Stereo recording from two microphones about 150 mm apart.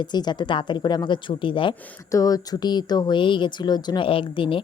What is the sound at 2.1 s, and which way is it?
Speech, 25° left (ahead or behind).